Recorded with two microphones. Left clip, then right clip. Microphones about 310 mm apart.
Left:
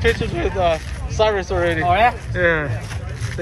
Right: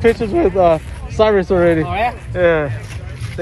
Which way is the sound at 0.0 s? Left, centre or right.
Centre.